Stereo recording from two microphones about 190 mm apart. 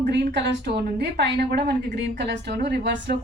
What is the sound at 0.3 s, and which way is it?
A woman's voice, 60° right (ahead or behind).